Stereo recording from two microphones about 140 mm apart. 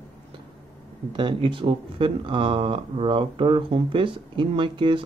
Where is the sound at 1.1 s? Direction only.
35° right (ahead or behind).